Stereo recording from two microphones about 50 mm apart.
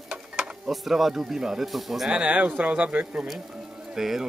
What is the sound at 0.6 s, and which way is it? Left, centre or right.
Speech, centre.